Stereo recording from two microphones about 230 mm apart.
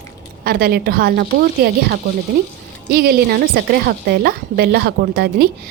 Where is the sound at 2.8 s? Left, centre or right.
Right.